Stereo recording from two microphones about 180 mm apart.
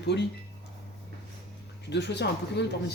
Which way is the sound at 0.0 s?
70° left (ahead or behind).